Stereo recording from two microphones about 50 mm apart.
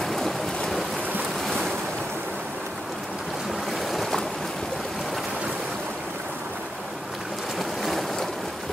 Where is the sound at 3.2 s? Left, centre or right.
Centre.